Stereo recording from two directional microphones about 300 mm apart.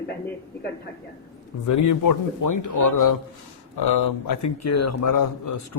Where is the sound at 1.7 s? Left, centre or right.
Left.